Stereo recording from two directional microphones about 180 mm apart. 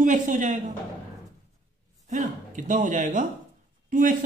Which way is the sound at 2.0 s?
45° right (ahead or behind).